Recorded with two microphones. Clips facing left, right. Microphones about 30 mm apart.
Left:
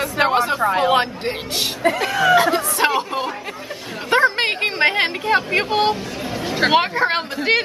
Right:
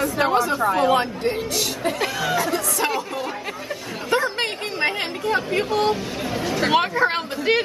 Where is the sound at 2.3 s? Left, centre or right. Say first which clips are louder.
Left 7 dB; left.